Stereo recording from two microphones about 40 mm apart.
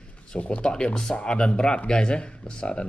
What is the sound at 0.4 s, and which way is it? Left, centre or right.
Speech, left.